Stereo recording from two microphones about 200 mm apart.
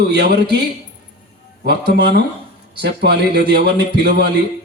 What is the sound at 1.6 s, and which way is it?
A man's voice, 55° right (ahead or behind).